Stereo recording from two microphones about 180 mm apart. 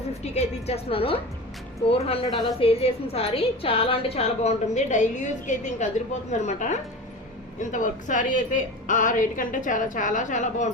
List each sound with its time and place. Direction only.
0.3 s a woman's voice: 35° left (ahead or behind)